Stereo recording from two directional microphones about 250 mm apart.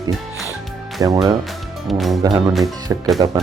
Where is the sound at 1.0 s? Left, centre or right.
Centre.